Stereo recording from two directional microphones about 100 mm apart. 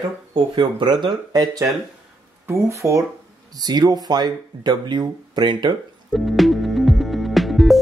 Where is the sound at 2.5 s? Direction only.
30° right (ahead or behind).